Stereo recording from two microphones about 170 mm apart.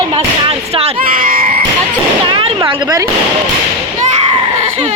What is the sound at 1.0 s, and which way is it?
Screaming, 55° right (ahead or behind).